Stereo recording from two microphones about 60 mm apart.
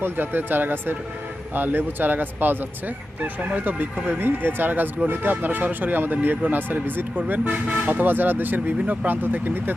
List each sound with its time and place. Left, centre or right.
0.0 s speech: right